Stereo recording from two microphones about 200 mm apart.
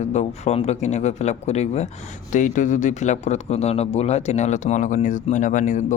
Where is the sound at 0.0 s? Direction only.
35° left (ahead or behind).